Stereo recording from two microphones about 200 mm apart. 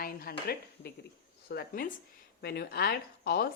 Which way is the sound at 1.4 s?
50° left (ahead or behind).